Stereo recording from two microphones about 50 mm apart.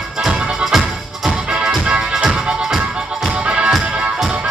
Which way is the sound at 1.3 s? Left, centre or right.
Centre.